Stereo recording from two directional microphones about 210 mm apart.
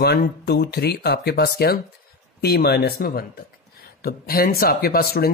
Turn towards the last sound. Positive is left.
turn(degrees=45)  # may be behind; listen again after turning